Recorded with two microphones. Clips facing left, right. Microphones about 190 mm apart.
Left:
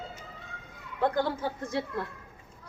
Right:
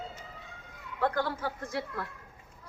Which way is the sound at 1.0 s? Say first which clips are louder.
Left 3 dB; 20° left (ahead or behind).